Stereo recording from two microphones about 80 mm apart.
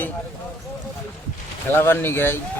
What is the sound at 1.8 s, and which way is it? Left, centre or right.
Speech, left.